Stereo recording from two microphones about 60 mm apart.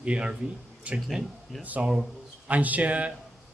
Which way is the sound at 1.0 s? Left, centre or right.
Centre.